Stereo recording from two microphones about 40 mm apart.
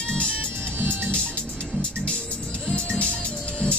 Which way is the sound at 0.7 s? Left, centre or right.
Right.